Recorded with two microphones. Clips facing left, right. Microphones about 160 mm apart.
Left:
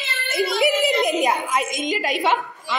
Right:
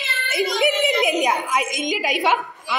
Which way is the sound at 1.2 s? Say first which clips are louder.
Even; centre (ahead or behind).